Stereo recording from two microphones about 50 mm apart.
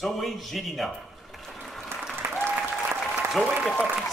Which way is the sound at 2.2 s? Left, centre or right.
Right.